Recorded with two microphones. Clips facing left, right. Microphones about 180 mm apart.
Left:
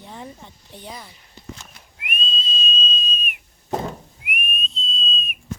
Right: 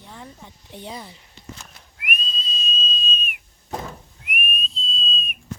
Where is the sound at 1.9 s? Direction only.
25° left (ahead or behind).